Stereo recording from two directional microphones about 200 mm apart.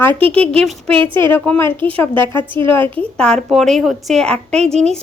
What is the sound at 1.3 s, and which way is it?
A woman's voice, 10° left (ahead or behind).